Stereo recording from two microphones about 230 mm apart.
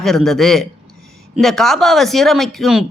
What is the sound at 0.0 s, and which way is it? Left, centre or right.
A woman's voice, centre.